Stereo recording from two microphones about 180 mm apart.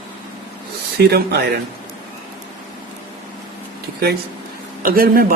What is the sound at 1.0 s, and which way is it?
Speech, 65° right (ahead or behind).